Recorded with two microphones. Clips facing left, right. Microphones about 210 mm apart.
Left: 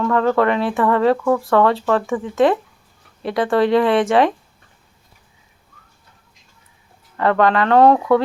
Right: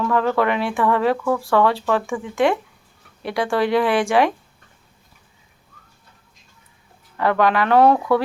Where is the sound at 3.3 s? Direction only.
Centre (ahead or behind).